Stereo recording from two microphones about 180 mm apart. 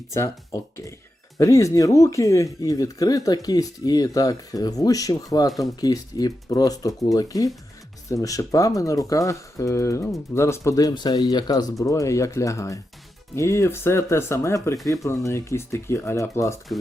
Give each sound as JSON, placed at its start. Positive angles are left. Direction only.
{"t": 0.1, "sound": "speech", "side_deg": 15}